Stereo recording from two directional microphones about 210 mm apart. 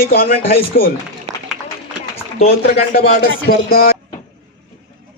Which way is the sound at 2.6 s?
45° left (ahead or behind).